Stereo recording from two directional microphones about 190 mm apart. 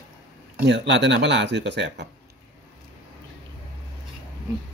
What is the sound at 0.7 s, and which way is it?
Speech, 70° right (ahead or behind).